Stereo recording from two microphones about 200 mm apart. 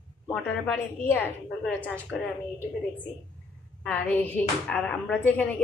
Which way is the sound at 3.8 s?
5° left (ahead or behind).